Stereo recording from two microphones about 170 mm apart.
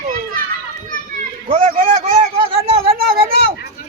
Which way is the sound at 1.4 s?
45° right (ahead or behind).